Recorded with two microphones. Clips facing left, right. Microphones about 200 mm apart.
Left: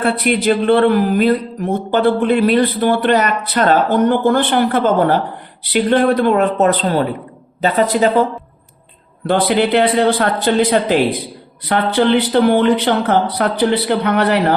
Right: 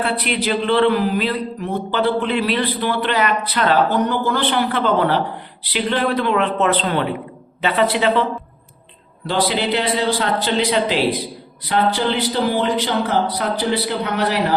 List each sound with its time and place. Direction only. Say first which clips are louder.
0.0 s speech: left 6 dB; 50° left (ahead or behind)
9.2 s speech: left 5 dB; 55° left (ahead or behind)
11.6 s speech: left 4 dB; 60° left (ahead or behind)